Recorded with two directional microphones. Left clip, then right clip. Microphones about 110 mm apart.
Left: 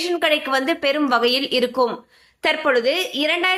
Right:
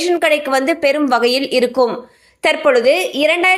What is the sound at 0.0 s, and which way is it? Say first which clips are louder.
A woman's voice: right 5 dB; 35° right (ahead or behind).